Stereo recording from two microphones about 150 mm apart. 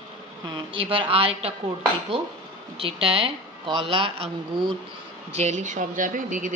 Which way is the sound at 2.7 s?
40° right (ahead or behind).